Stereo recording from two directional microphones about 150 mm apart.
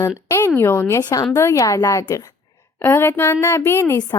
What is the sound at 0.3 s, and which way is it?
A woman's voice, 15° left (ahead or behind).